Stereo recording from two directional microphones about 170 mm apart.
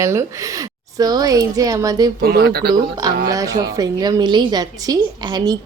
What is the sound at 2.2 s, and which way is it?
Speech, 60° right (ahead or behind).